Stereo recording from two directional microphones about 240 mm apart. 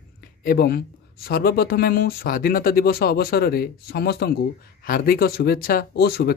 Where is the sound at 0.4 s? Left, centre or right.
Left.